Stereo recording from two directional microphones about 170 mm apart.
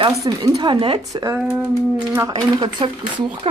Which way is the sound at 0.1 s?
20° right (ahead or behind).